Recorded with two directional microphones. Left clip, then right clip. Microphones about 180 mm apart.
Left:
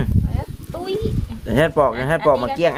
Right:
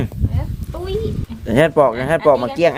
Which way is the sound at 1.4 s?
25° right (ahead or behind).